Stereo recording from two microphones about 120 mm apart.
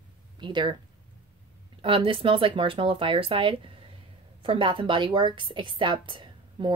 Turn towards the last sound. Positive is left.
turn(degrees=-40)  # may be behind; listen again after turning